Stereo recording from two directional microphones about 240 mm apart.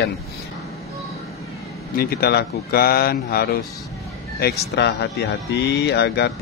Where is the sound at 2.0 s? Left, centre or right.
Left.